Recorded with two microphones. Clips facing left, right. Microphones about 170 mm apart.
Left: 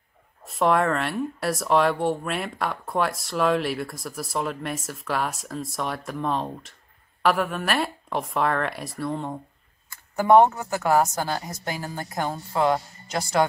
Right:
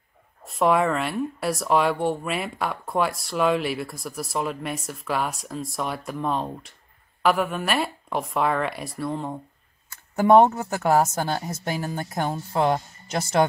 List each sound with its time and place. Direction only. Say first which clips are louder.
0.5 s speech: right 1 dB; centre (ahead or behind)
10.1 s a woman's voice: right 1 dB; 20° right (ahead or behind)